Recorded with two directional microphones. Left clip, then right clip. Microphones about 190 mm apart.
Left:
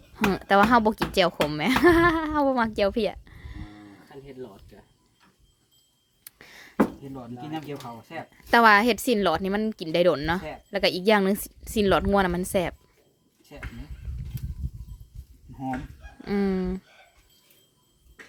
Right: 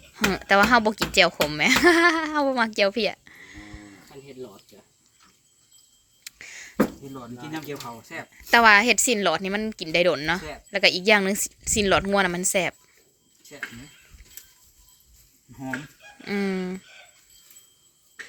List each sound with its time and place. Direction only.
0.1 s speech: 15° left (ahead or behind)
6.2 s a sound: 15° left (ahead or behind)
8.3 s speech: 15° left (ahead or behind)
16.2 s speech: 15° left (ahead or behind)